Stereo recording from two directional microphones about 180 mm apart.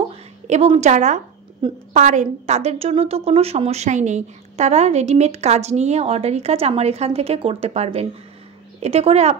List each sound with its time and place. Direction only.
0.1 s a woman's voice: 35° right (ahead or behind)